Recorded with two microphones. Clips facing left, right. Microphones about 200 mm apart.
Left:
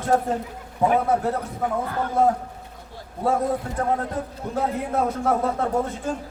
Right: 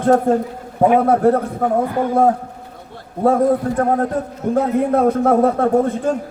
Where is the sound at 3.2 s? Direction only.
55° right (ahead or behind).